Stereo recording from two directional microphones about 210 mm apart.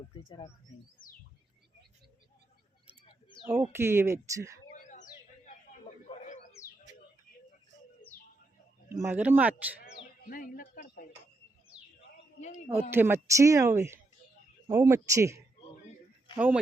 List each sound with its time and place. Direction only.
0.3 s speech: 20° left (ahead or behind)
3.4 s speech: 10° right (ahead or behind)
4.7 s a sound: 35° left (ahead or behind)
6.1 s bird: 35° left (ahead or behind)
8.9 s speech: 10° right (ahead or behind)
10.2 s speech: 40° left (ahead or behind)
12.4 s speech: 35° left (ahead or behind)
12.9 s speech: 10° right (ahead or behind)